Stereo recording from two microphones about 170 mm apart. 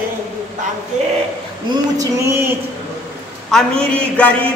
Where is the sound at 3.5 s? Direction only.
5° left (ahead or behind).